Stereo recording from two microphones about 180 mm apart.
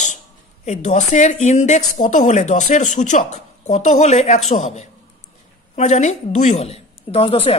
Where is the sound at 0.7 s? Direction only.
40° left (ahead or behind).